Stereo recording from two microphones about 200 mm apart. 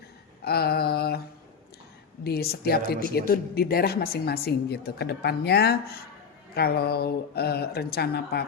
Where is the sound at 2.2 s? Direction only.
50° left (ahead or behind).